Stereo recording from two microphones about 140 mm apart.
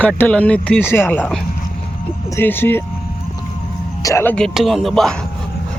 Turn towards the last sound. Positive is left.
turn(degrees=0)  # may be behind; listen again after turning